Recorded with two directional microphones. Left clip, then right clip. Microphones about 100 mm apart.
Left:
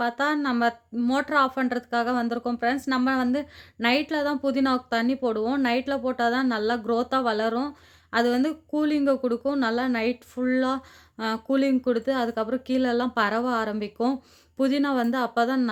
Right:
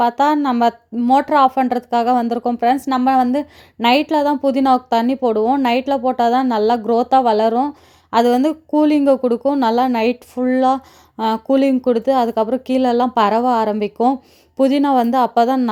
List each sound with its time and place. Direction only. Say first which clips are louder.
0.0 s a woman's voice: right 10 dB; 45° right (ahead or behind)
1.2 s a woman's voice: right 9 dB; 45° right (ahead or behind)